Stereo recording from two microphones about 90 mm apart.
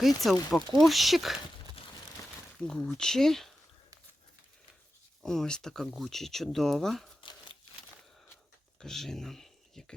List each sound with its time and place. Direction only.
0.0 s speech: centre (ahead or behind)
1.8 s crumpling: 90° left
2.6 s speech: 10° left (ahead or behind)
5.2 s speech: 5° left (ahead or behind)
7.2 s crumpling: 80° left
8.8 s a sound: 5° left (ahead or behind)